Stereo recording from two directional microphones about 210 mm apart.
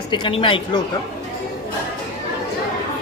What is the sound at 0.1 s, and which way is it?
Speech, 25° left (ahead or behind).